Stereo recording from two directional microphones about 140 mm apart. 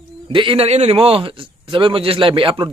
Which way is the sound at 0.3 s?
40° right (ahead or behind).